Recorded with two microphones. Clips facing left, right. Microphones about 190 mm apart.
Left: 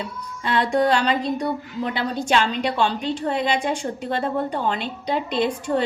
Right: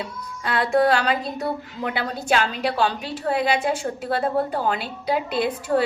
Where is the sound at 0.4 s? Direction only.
5° right (ahead or behind).